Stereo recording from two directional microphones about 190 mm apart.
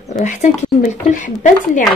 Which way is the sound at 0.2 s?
40° left (ahead or behind).